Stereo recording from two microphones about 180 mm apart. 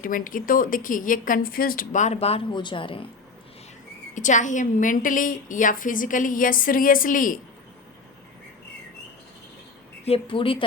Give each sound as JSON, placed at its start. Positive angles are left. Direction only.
{"t": 0.0, "sound": "a woman's voice", "side_deg": 50}
{"t": 4.1, "sound": "a woman's voice", "side_deg": 45}
{"t": 10.1, "sound": "a woman's voice", "side_deg": 30}